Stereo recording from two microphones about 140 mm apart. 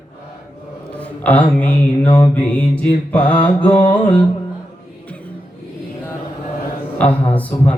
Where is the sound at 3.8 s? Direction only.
35° left (ahead or behind).